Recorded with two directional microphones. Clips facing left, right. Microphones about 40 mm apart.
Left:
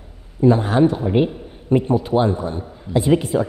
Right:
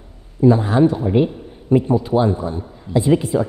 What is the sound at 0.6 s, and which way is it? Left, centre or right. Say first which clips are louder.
A man's voice: right 1 dB; left.